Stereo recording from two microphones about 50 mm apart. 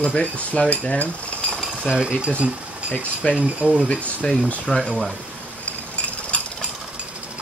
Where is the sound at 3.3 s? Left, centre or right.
Right.